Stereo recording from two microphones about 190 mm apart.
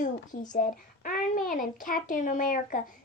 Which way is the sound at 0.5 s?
45° left (ahead or behind).